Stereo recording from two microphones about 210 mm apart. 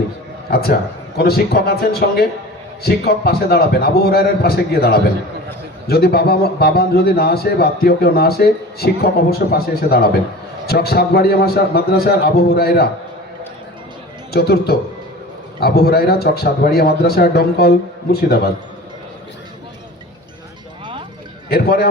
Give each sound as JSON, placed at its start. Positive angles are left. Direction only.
{"t": 0.5, "sound": "a man's voice", "side_deg": 45}
{"t": 14.3, "sound": "a man's voice", "side_deg": 50}
{"t": 21.5, "sound": "a man's voice", "side_deg": 45}